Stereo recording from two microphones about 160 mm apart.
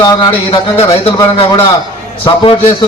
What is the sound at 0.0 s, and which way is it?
A man's voice, 25° left (ahead or behind).